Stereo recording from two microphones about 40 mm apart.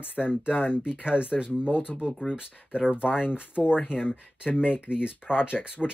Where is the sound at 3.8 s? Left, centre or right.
Left.